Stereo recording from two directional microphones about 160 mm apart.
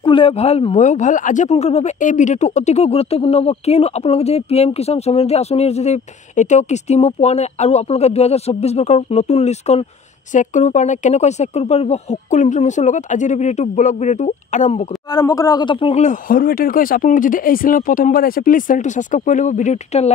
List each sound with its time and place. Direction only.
0.0 s speech: 35° left (ahead or behind)
15.0 s a man's voice: 25° left (ahead or behind)
16.0 s speech: 55° left (ahead or behind)